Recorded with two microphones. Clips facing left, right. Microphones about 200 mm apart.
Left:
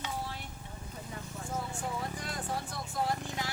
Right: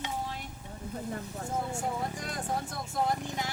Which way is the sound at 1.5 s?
45° right (ahead or behind).